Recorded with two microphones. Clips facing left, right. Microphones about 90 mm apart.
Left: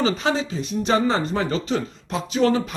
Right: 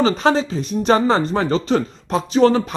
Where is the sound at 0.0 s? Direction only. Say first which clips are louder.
Right 5 dB; 40° right (ahead or behind).